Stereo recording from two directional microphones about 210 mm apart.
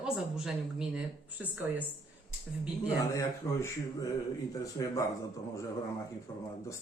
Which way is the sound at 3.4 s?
5° left (ahead or behind).